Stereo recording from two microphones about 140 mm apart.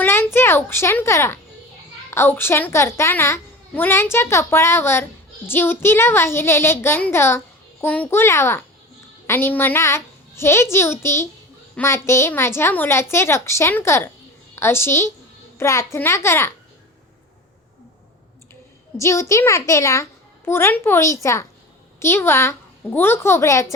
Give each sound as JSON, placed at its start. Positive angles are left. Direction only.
{"t": 0.0, "sound": "a child's voice", "side_deg": 15}
{"t": 18.9, "sound": "a child's voice", "side_deg": 20}